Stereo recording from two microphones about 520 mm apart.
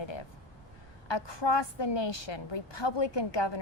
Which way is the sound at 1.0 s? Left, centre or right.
Left.